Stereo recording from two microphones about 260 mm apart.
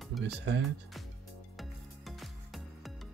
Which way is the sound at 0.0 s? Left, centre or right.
Centre.